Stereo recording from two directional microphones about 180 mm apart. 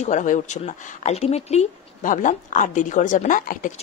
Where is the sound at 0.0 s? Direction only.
45° left (ahead or behind).